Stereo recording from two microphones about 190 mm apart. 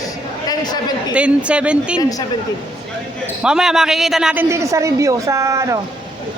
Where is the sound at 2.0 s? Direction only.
20° left (ahead or behind).